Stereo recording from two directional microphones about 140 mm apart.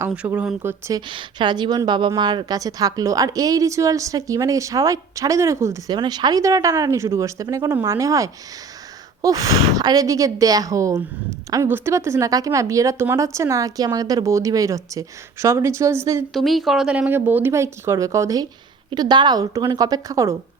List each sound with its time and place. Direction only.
0.0 s speech: 15° right (ahead or behind)
1.0 s a woman's voice: 35° right (ahead or behind)
16.3 s a woman's voice: centre (ahead or behind); by 20.3 s 25° right (ahead or behind)